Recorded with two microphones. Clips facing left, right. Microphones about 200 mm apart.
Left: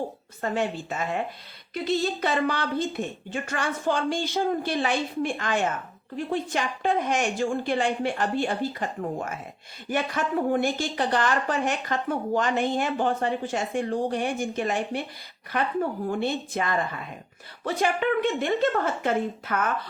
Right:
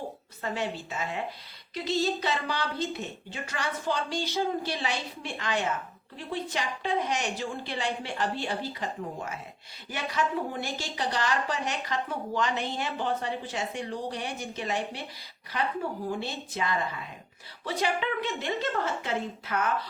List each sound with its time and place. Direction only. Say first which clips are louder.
0.4 s speech: left 5 dB; 50° left (ahead or behind)